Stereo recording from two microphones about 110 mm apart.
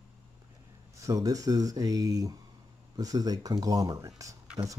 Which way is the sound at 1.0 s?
30° right (ahead or behind).